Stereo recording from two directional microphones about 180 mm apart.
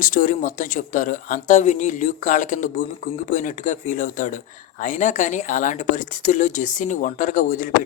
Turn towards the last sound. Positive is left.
turn(degrees=45)  # may be behind; listen again after turning